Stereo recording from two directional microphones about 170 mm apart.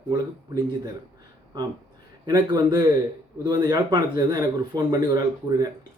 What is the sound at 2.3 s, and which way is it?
Speech, 25° right (ahead or behind).